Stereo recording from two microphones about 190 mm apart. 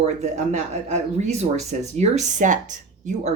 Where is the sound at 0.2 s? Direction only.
35° right (ahead or behind).